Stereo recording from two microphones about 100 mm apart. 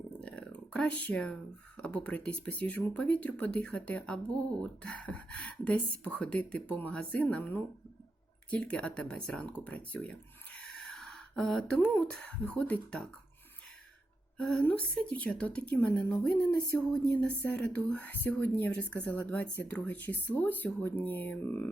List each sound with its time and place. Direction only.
0.2 s speech: 10° left (ahead or behind)
14.3 s speech: 10° left (ahead or behind)